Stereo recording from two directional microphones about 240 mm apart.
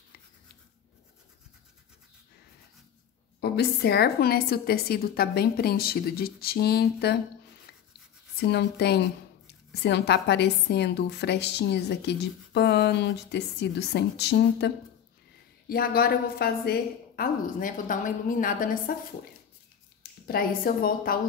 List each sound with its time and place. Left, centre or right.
3.3 s a woman's voice: left
8.4 s a woman's voice: left
15.7 s a woman's voice: left
20.0 s speech: left